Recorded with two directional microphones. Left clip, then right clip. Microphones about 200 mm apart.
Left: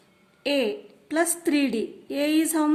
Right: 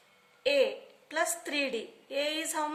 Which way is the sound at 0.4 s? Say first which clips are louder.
Left 2 dB; 35° left (ahead or behind).